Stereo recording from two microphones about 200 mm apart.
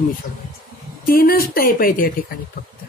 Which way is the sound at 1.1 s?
45° left (ahead or behind).